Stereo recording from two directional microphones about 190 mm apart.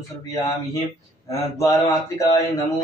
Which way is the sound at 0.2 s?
15° left (ahead or behind).